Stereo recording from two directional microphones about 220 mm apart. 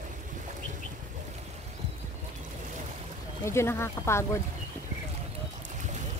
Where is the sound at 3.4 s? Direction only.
10° left (ahead or behind).